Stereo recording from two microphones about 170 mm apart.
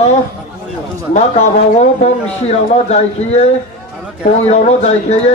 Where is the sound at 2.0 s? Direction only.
40° left (ahead or behind).